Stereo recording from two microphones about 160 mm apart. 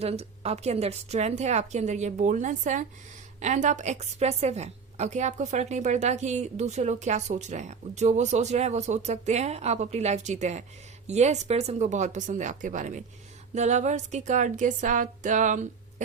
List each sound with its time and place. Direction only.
0.0 s a woman's voice: 40° right (ahead or behind)